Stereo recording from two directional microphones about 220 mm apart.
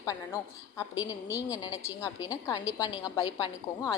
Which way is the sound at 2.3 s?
15° left (ahead or behind).